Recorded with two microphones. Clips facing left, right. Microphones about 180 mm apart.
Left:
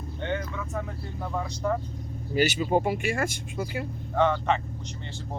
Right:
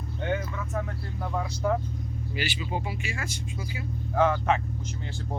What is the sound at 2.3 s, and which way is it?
Speech, 45° left (ahead or behind).